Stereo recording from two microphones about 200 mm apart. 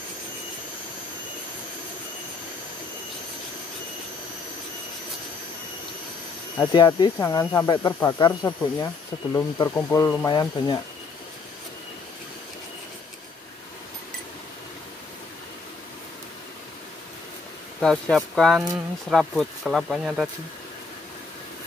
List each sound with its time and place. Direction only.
6.6 s speech: 20° left (ahead or behind)
17.7 s speech: 5° left (ahead or behind)